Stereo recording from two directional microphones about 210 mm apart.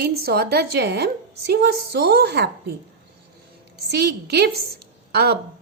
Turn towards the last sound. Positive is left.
turn(degrees=-50)  # may be behind; listen again after turning